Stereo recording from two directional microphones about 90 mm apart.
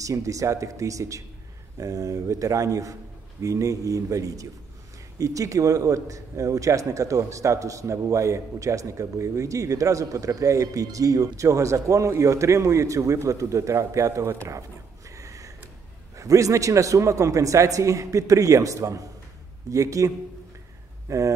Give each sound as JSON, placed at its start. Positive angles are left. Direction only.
{"t": 0.0, "sound": "a man's voice", "side_deg": -35}
{"t": 15.0, "sound": "a sound", "side_deg": -35}
{"t": 16.2, "sound": "a man's voice", "side_deg": -35}
{"t": 21.1, "sound": "a man's voice", "side_deg": -35}